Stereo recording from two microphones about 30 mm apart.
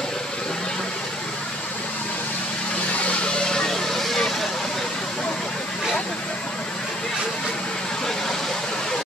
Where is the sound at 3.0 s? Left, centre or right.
Left.